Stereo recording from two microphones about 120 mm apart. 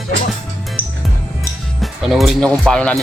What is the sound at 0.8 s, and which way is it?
Music, 10° left (ahead or behind).